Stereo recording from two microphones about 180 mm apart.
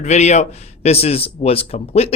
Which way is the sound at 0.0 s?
40° left (ahead or behind).